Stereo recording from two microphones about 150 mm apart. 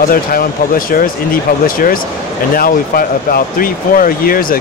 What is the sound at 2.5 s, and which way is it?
Speech, 75° left (ahead or behind).